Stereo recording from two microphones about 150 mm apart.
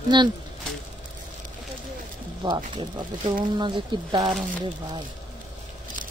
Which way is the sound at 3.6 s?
30° right (ahead or behind).